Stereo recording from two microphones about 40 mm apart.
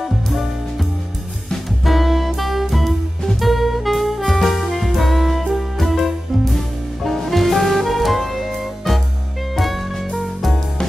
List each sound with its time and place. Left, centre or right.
0.0 s music: centre
1.5 s music: centre
3.3 s saxophone: centre
9.6 s music: centre